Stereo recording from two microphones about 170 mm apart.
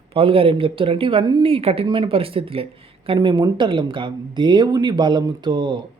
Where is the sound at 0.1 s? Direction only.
35° right (ahead or behind).